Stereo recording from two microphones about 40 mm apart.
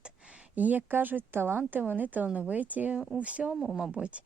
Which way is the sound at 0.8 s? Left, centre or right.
Right.